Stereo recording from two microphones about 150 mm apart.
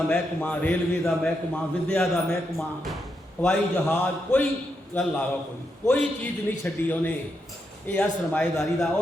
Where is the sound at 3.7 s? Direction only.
20° left (ahead or behind).